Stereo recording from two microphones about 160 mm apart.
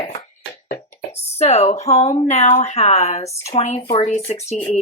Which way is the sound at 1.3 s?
40° left (ahead or behind).